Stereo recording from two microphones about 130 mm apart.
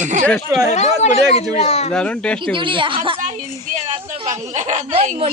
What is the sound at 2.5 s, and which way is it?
Speech, 40° right (ahead or behind).